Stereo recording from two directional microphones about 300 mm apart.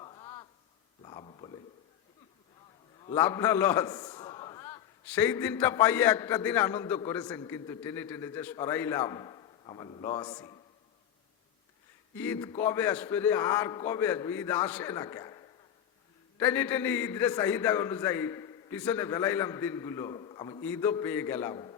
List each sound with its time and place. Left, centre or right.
0.0 s a sound: centre
3.2 s a man's voice: centre
12.1 s a man's voice: centre